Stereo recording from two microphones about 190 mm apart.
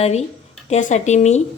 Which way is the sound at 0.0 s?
35° left (ahead or behind).